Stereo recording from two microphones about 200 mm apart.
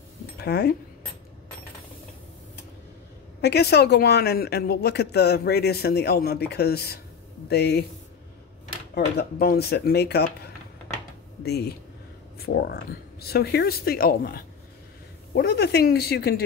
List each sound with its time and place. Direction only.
0.4 s speech: 55° left (ahead or behind)
3.3 s speech: 55° left (ahead or behind)
8.9 s speech: 50° left (ahead or behind)